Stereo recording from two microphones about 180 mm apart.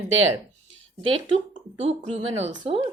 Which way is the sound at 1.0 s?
30° right (ahead or behind).